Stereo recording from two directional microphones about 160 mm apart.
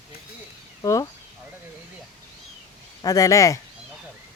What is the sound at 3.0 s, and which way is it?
Speech, 20° left (ahead or behind).